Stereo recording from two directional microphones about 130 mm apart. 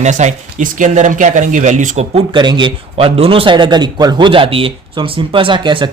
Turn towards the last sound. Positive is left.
turn(degrees=-35)  # may be behind; listen again after turning